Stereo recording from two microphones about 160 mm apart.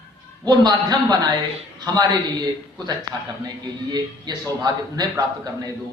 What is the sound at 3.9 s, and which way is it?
A man's voice, 25° right (ahead or behind).